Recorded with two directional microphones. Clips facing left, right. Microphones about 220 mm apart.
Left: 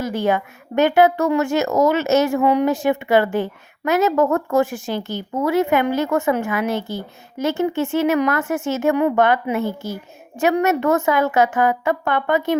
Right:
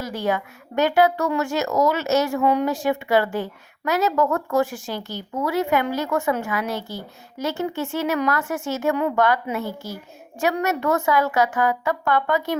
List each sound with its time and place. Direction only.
0.0 s a woman's voice: 20° left (ahead or behind)